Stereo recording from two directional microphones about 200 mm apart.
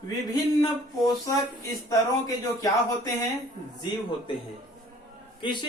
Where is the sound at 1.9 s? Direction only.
20° left (ahead or behind).